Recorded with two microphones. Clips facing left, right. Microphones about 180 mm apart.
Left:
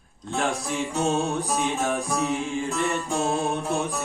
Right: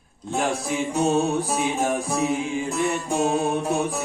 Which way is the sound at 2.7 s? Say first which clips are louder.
Right 3 dB; 15° right (ahead or behind).